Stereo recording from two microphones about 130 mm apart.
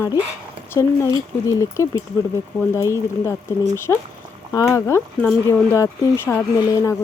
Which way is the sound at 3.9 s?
15° left (ahead or behind).